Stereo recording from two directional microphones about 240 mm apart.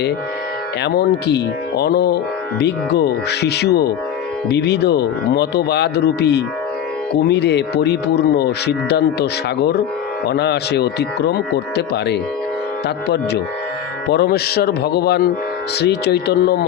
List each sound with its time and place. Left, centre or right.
0.9 s speech: left
14.1 s a man's voice: left